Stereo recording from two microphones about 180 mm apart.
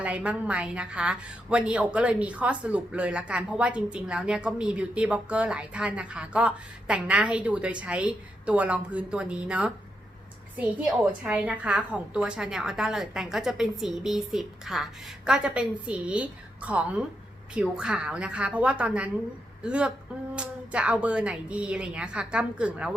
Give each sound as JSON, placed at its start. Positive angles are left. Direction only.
{"t": 0.0, "sound": "a woman's voice", "side_deg": -5}